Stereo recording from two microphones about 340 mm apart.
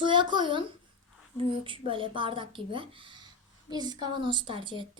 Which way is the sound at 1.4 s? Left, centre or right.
Centre.